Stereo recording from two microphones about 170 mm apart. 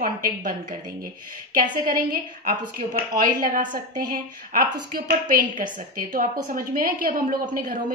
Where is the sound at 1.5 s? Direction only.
55° right (ahead or behind).